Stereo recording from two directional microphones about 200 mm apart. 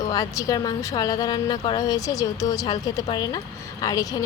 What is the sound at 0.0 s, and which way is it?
A woman's voice, 15° left (ahead or behind).